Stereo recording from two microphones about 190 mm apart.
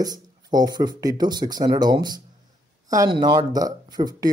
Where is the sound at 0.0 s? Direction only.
20° right (ahead or behind).